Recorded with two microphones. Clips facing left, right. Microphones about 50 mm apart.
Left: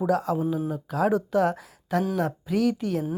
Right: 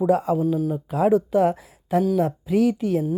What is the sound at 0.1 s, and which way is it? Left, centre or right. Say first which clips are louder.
Speech: right 3 dB; right.